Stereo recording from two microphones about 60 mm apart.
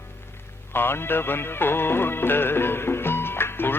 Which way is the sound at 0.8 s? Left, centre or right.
Left.